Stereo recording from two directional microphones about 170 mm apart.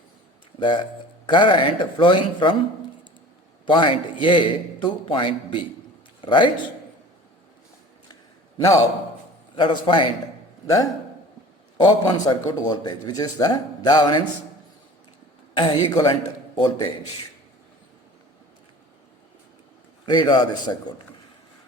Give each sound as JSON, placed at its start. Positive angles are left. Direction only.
{"t": 0.6, "sound": "speech", "side_deg": 30}
{"t": 3.7, "sound": "a man's voice", "side_deg": 30}
{"t": 8.5, "sound": "a man's voice", "side_deg": 20}
{"t": 11.8, "sound": "speech", "side_deg": 25}
{"t": 15.5, "sound": "speech", "side_deg": 25}
{"t": 20.1, "sound": "speech", "side_deg": 25}